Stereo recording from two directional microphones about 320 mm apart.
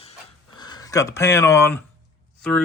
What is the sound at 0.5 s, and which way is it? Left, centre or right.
Speech, centre.